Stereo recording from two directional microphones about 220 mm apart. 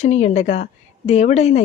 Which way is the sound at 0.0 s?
30° left (ahead or behind).